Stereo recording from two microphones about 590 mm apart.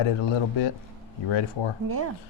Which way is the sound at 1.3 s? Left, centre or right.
Left.